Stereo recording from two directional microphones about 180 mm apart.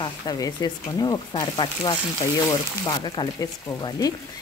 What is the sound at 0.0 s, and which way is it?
Speech, 20° left (ahead or behind).